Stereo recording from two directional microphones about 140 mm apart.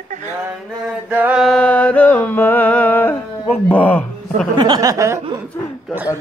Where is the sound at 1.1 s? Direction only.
10° right (ahead or behind); by 3.2 s 15° left (ahead or behind).